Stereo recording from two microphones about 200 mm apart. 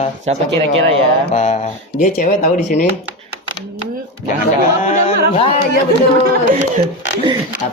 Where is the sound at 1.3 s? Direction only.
35° left (ahead or behind).